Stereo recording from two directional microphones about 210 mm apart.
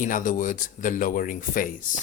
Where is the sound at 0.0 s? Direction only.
40° left (ahead or behind).